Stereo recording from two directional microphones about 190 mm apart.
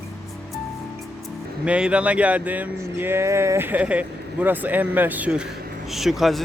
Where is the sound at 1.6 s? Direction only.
5° right (ahead or behind).